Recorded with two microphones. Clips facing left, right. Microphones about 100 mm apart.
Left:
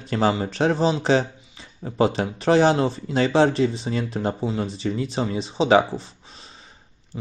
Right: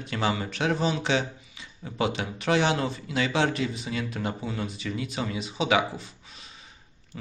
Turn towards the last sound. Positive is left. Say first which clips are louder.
# left 4 dB
turn(degrees=30)  # may be behind; listen again after turning